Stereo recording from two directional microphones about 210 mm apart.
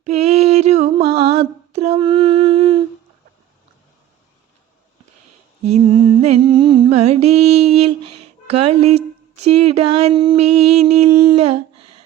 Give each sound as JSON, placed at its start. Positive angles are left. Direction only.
{"t": 0.0, "sound": "mantra", "side_deg": -30}
{"t": 5.6, "sound": "music", "side_deg": -30}
{"t": 8.4, "sound": "speech", "side_deg": -30}
{"t": 9.3, "sound": "music", "side_deg": -30}